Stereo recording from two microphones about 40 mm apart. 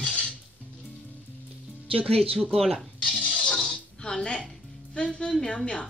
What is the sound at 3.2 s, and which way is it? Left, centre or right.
Music, left.